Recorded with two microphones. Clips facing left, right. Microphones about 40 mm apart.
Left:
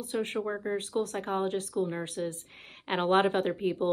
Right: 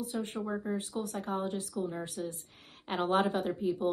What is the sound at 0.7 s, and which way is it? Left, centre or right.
Speech, left.